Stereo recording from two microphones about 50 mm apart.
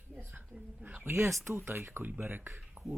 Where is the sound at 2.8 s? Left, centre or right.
Right.